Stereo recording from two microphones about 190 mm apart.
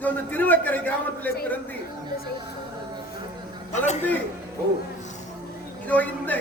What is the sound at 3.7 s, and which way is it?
Speech, 40° left (ahead or behind).